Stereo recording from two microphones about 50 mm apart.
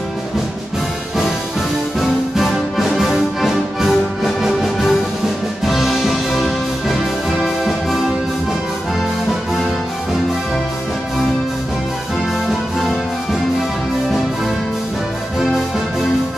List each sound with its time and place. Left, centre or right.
2.0 s music: centre
12.4 s music: centre